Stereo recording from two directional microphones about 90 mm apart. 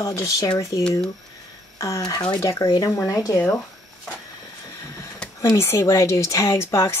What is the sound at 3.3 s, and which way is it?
Speech, 15° left (ahead or behind).